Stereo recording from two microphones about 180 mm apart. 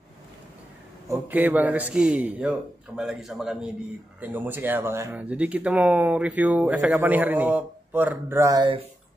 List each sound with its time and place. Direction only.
1.0 s a man's voice: 10° right (ahead or behind)